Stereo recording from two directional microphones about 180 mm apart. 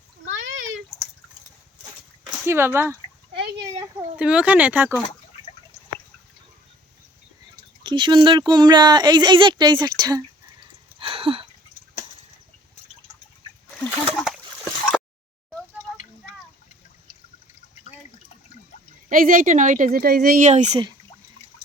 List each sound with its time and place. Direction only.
0.3 s a sound: 90° right
2.5 s speech: 15° right (ahead or behind)
4.2 s speech: 5° right (ahead or behind)
7.9 s speech: 25° right (ahead or behind)
11.0 s a sound: 30° right (ahead or behind)
13.7 s splash: 10° left (ahead or behind)
19.0 s speech: 50° right (ahead or behind)